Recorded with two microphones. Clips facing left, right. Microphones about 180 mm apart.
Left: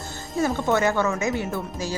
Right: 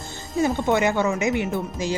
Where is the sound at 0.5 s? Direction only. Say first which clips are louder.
Left 1 dB; 15° right (ahead or behind).